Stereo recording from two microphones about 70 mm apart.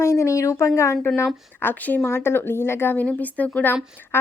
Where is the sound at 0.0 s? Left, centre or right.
Left.